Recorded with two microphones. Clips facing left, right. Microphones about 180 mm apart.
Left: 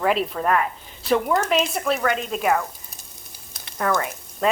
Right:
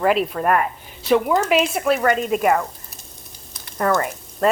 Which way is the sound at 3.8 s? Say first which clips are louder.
Right 3 dB; centre (ahead or behind).